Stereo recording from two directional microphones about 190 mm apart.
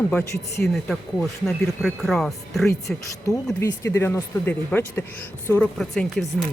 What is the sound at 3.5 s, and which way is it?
Speech, 15° left (ahead or behind).